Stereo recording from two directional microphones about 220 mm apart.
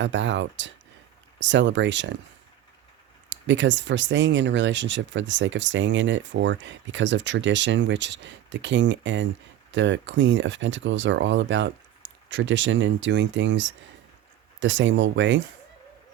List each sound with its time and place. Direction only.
0.0 s speech: 55° right (ahead or behind)
3.2 s speech: 55° right (ahead or behind)